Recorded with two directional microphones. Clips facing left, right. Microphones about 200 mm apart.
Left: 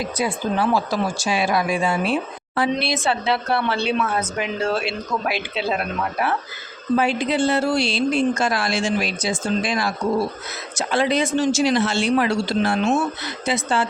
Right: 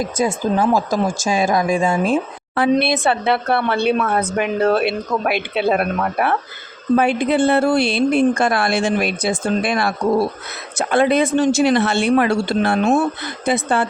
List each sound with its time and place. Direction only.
0.0 s speech: 45° right (ahead or behind)